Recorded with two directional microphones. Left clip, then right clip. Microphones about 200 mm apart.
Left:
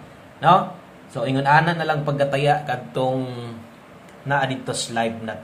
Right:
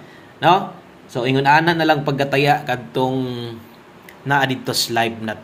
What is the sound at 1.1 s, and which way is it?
Speech, 25° right (ahead or behind).